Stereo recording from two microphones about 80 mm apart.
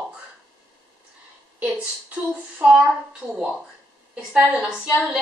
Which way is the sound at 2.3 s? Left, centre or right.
Centre.